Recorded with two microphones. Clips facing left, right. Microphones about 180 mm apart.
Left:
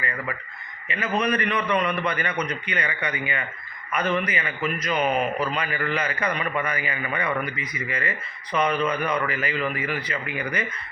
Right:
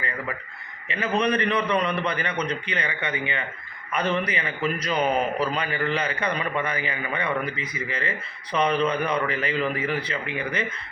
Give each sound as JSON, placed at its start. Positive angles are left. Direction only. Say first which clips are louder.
{"t": 0.9, "sound": "a man's voice", "louder": "right 1 dB", "side_deg": -30}